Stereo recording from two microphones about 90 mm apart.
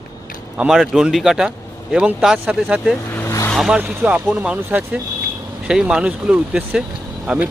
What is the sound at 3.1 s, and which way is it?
Vehicle, 30° left (ahead or behind).